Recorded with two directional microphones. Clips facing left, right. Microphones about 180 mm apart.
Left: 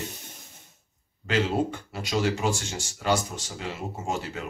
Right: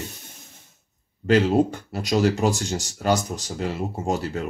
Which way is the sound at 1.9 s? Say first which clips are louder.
Right 5 dB; 40° right (ahead or behind).